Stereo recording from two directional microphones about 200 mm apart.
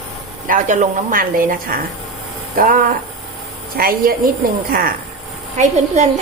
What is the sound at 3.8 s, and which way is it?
Speech, 50° right (ahead or behind).